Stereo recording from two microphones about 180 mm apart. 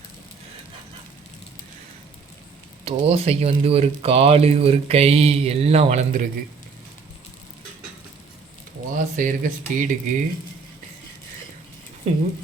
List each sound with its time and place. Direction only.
2.8 s speech: 35° right (ahead or behind)
9.1 s speech: 45° right (ahead or behind)
12.1 s speech: 35° right (ahead or behind)